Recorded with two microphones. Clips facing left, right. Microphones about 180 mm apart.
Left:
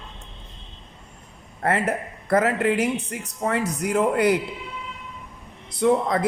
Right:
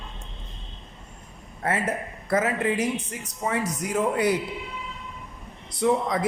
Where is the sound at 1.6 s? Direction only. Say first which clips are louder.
Left 3 dB; 65° left (ahead or behind).